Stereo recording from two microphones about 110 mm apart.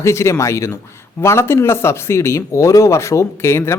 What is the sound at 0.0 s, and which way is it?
Speech, 25° left (ahead or behind).